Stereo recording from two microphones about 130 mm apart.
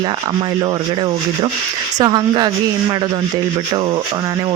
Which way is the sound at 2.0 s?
35° right (ahead or behind).